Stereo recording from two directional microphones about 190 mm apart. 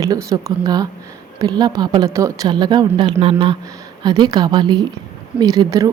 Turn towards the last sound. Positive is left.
turn(degrees=-20)  # may be behind; listen again after turning